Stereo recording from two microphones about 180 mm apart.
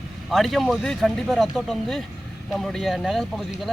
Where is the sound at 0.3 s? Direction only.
Centre (ahead or behind).